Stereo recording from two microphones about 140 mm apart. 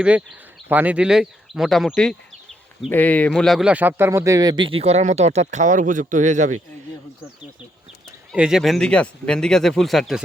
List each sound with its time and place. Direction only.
0.0 s a man's voice: 5° right (ahead or behind); by 6.6 s 60° right (ahead or behind)
8.3 s speech: 5° right (ahead or behind)